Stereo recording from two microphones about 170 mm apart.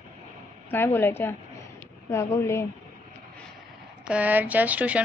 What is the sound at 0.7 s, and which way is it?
A woman's voice, 15° left (ahead or behind).